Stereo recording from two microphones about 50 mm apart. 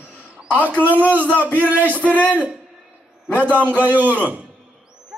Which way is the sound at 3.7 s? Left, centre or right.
Right.